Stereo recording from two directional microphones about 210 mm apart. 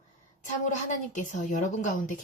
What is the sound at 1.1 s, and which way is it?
Speech, 35° left (ahead or behind).